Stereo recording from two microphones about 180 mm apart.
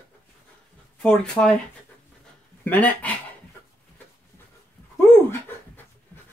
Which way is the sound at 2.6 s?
10° left (ahead or behind).